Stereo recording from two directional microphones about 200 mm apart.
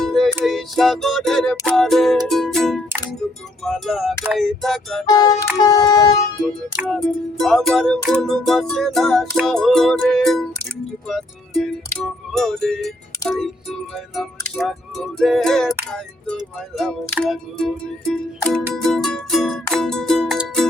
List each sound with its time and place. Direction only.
0.0 s music: centre (ahead or behind)
5.0 s music: 20° left (ahead or behind)
6.4 s music: centre (ahead or behind)